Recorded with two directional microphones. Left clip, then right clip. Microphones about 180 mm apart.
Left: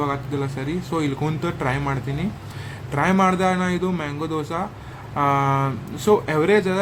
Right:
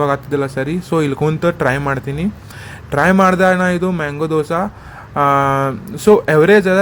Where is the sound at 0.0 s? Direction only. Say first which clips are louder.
Right 9 dB; 50° right (ahead or behind).